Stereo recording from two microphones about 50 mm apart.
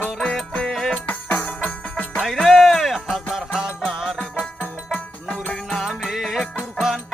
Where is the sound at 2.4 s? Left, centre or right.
Centre.